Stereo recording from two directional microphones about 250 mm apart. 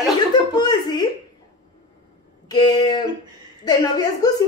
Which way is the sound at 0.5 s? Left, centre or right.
Centre.